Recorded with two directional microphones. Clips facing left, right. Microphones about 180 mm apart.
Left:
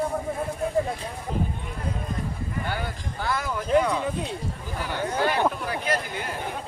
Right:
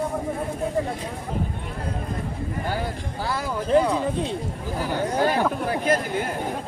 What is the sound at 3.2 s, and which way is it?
Speech, 30° right (ahead or behind).